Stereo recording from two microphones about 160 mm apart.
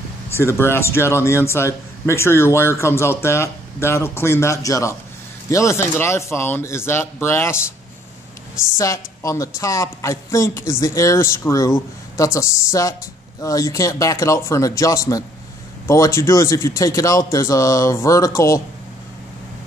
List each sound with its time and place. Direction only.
0.3 s speech: 15° left (ahead or behind)
8.6 s speech: 20° left (ahead or behind)